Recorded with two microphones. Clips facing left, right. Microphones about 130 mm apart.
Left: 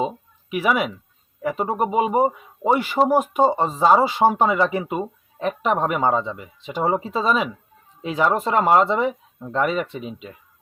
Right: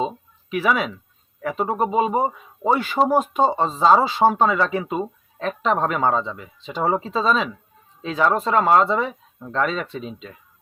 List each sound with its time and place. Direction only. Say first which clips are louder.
0.0 s speech: left 1 dB; 15° left (ahead or behind)